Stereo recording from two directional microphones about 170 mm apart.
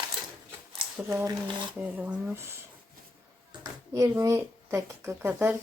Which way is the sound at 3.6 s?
20° right (ahead or behind).